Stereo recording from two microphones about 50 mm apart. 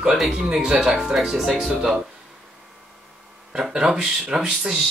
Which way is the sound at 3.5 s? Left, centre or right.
Centre.